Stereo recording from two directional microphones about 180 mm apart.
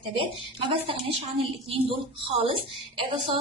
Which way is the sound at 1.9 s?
30° right (ahead or behind).